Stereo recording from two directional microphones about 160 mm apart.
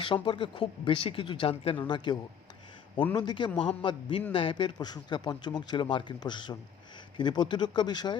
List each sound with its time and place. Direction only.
0.0 s speech: 30° left (ahead or behind)
3.5 s a man's voice: 5° left (ahead or behind)
4.3 s speech: 30° left (ahead or behind)